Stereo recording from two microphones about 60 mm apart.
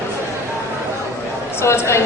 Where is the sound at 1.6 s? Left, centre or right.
Left.